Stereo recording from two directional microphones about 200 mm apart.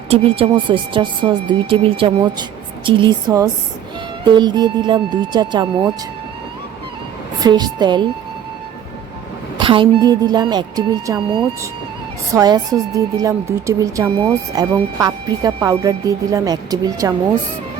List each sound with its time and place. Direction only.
0.1 s a woman's voice: 30° right (ahead or behind)
7.4 s a woman's voice: 20° right (ahead or behind)
9.6 s a woman's voice: 25° right (ahead or behind)
12.3 s a woman's voice: 20° right (ahead or behind)